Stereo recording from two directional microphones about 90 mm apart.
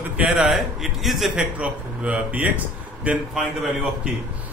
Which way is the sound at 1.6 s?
15° right (ahead or behind).